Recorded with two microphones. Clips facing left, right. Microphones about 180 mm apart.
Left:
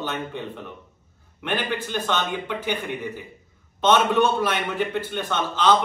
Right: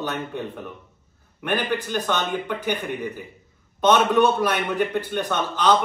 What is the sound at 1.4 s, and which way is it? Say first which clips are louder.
Speech: right 2 dB; 5° right (ahead or behind).